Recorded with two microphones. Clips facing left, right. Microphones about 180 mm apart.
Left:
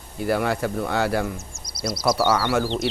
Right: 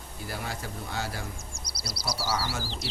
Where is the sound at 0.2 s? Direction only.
65° left (ahead or behind).